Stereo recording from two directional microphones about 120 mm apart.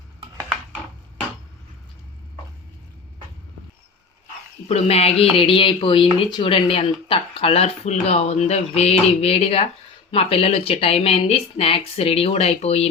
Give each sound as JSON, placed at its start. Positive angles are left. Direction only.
{"t": 4.7, "sound": "speech", "side_deg": 55}